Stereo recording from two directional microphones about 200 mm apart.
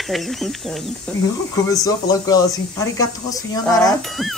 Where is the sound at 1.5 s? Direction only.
15° left (ahead or behind).